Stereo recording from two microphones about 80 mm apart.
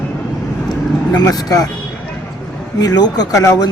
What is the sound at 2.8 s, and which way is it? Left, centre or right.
Speech, left.